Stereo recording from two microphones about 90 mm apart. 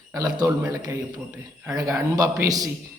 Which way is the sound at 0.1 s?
40° right (ahead or behind).